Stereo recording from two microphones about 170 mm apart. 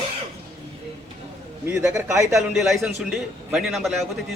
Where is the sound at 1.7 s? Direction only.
15° right (ahead or behind).